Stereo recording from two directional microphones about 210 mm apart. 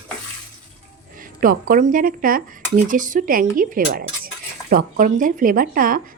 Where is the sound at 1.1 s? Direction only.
40° right (ahead or behind).